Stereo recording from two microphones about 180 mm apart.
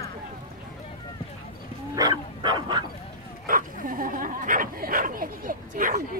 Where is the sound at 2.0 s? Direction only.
25° right (ahead or behind).